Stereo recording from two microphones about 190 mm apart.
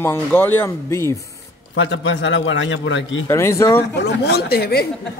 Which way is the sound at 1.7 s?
70° left (ahead or behind).